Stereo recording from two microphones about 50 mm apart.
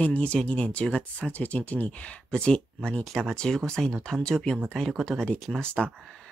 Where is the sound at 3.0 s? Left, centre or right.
Centre.